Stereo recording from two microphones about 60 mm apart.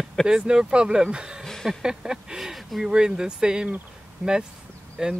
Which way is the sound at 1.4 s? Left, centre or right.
Centre.